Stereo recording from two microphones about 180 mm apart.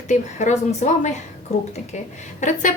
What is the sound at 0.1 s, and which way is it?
A woman's voice, 40° left (ahead or behind).